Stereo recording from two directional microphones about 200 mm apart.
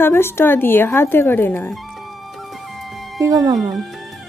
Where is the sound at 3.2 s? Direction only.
15° right (ahead or behind).